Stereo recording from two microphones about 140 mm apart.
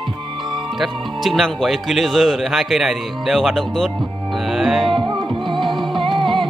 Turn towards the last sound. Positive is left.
turn(degrees=-35)  # may be behind; listen again after turning